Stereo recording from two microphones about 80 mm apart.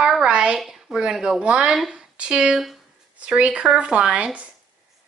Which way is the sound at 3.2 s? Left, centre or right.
Centre.